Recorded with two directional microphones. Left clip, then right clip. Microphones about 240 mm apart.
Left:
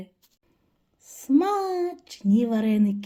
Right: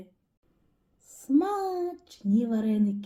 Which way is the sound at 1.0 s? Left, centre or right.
Left.